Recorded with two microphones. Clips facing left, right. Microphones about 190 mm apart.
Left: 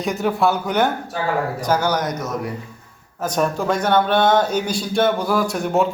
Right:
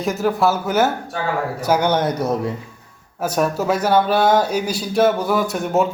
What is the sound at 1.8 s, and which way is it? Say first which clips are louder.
Speech: right 3 dB; 25° right (ahead or behind).